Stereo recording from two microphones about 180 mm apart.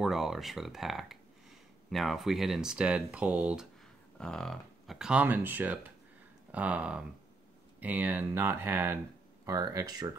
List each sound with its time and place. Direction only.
0.0 s speech: centre (ahead or behind); by 10.1 s 20° right (ahead or behind)